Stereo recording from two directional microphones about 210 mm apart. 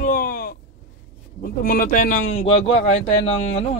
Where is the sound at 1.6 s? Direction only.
40° left (ahead or behind).